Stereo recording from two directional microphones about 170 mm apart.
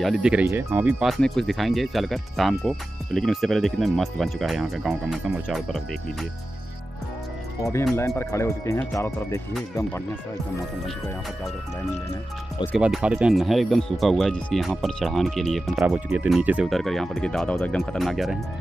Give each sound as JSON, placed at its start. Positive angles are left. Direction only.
{"t": 0.0, "sound": "speech", "side_deg": -5}
{"t": 8.2, "sound": "speech", "side_deg": 15}
{"t": 12.7, "sound": "speech", "side_deg": -5}